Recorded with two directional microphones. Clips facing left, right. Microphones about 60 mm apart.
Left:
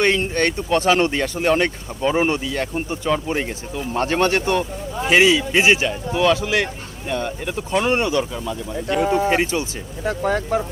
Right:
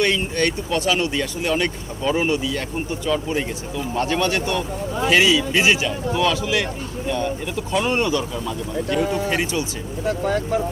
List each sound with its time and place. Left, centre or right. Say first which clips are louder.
0.3 s speech: left 2 dB; left